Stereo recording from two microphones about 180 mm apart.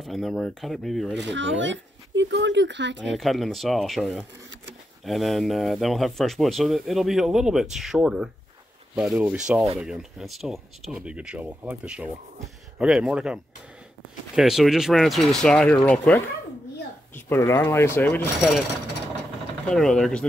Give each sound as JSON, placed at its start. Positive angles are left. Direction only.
{"t": 0.0, "sound": "speech", "side_deg": 0}
{"t": 1.1, "sound": "speech", "side_deg": -85}
{"t": 3.2, "sound": "speech", "side_deg": 0}
{"t": 19.7, "sound": "speech", "side_deg": 0}